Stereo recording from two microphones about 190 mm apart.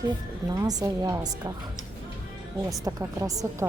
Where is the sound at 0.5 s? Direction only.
20° right (ahead or behind).